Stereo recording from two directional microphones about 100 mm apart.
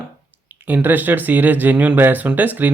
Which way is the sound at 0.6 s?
20° right (ahead or behind).